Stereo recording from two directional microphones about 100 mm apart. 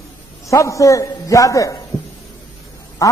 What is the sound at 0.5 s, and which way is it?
A man's voice, 30° left (ahead or behind).